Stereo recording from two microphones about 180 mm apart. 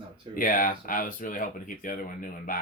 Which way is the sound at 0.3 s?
50° left (ahead or behind).